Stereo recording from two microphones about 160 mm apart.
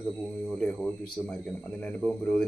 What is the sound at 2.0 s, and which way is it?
Speech, 5° left (ahead or behind).